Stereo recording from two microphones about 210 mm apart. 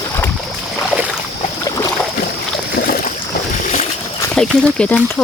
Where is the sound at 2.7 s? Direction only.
45° left (ahead or behind).